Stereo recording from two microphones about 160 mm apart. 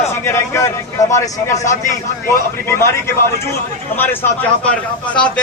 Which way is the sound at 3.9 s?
15° left (ahead or behind).